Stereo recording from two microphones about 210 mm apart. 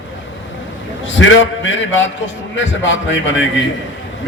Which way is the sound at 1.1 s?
65° left (ahead or behind).